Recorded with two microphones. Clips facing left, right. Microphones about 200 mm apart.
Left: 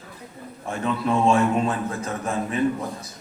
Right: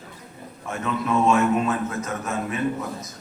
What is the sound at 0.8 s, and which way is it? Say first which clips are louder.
A man's voice: left 1 dB; 30° left (ahead or behind).